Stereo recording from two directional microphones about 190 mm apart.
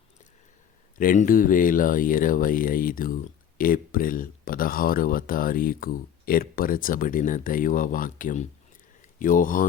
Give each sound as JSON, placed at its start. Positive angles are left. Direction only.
{"t": 0.9, "sound": "speech", "side_deg": 45}